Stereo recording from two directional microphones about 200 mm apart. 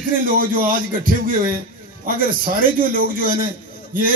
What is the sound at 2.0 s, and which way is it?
A man's voice, 45° right (ahead or behind).